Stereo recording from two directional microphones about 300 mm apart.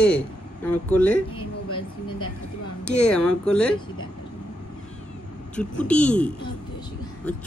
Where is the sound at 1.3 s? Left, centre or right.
Centre.